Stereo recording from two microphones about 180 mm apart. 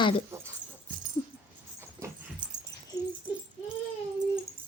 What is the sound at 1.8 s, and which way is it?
Dog, 15° right (ahead or behind).